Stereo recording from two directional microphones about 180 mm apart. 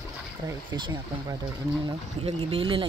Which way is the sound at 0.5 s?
25° right (ahead or behind).